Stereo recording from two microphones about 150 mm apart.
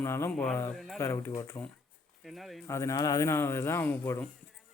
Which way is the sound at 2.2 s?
Centre (ahead or behind).